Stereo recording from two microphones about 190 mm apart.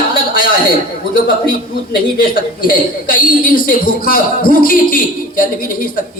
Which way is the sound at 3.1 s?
50° left (ahead or behind).